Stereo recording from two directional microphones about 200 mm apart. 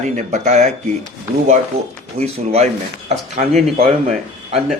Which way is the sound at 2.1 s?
30° right (ahead or behind).